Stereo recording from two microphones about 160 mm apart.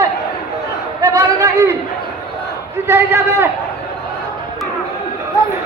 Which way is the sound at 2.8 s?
15° right (ahead or behind).